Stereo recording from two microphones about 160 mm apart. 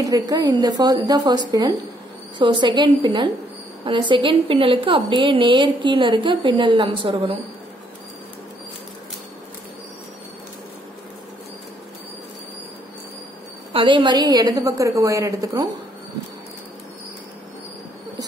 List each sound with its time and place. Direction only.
0.0 s a woman's voice: 25° right (ahead or behind)
13.7 s a woman's voice: 30° right (ahead or behind)